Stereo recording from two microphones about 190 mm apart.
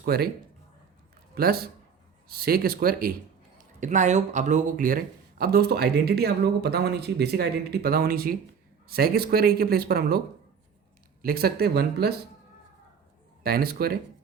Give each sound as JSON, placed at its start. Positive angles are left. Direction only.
{"t": 0.0, "sound": "a man's voice", "side_deg": -55}
{"t": 1.4, "sound": "speech", "side_deg": -55}
{"t": 3.6, "sound": "speech", "side_deg": -40}
{"t": 11.2, "sound": "speech", "side_deg": -50}
{"t": 13.4, "sound": "speech", "side_deg": -55}